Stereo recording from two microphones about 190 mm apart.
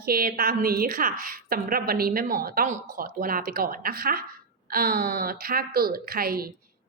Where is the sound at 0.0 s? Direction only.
50° right (ahead or behind).